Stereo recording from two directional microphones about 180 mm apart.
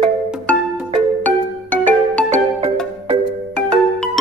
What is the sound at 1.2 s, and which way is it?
Music, 10° left (ahead or behind).